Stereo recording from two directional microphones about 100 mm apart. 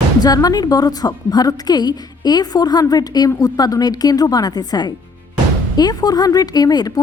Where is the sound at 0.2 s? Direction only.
40° left (ahead or behind).